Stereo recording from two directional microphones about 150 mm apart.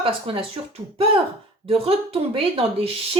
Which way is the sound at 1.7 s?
40° right (ahead or behind).